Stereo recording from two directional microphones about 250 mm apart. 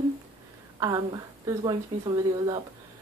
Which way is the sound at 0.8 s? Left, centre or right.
Centre.